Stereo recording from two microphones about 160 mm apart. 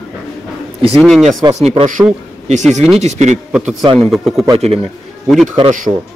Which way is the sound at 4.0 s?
Centre (ahead or behind).